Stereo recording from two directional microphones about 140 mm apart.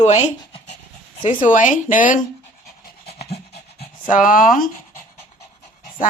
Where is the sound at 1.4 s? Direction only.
70° left (ahead or behind).